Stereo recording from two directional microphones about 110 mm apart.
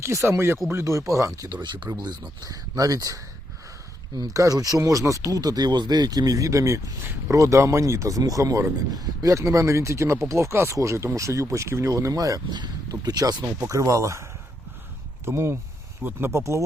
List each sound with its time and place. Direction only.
0.0 s speech: 25° right (ahead or behind)
1.5 s speech: 45° right (ahead or behind); by 16.6 s 25° right (ahead or behind)